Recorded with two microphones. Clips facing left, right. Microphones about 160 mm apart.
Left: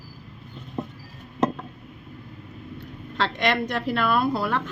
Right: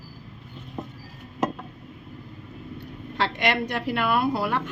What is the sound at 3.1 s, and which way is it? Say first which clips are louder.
A woman's voice: left 1 dB; 15° right (ahead or behind).